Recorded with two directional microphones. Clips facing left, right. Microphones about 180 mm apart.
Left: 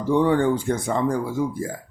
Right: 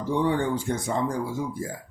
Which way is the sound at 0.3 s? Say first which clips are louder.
Left 5 dB; 55° left (ahead or behind).